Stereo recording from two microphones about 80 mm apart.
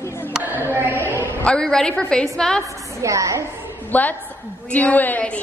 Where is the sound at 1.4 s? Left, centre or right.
Centre.